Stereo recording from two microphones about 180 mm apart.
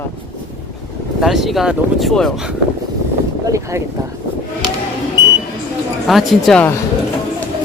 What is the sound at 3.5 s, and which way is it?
Speech, 15° right (ahead or behind).